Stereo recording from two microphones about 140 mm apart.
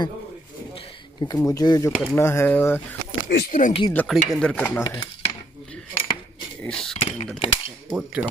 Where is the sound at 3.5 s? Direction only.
70° left (ahead or behind).